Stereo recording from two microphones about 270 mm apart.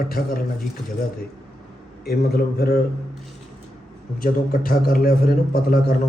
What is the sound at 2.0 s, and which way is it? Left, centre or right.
Speech, left.